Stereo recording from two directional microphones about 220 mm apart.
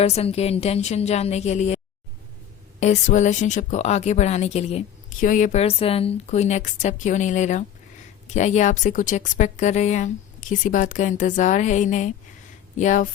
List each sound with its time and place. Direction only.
0.0 s a woman's voice: 25° left (ahead or behind)
2.8 s speech: 30° left (ahead or behind)